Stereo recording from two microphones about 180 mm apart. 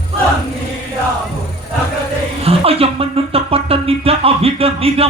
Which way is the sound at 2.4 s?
30° right (ahead or behind).